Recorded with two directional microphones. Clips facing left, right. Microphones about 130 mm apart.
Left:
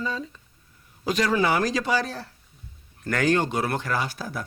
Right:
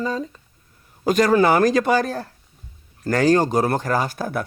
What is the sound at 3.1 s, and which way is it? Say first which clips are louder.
Speech: right 6 dB; 35° right (ahead or behind).